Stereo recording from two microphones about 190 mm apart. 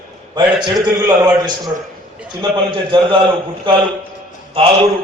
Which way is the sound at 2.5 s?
25° right (ahead or behind).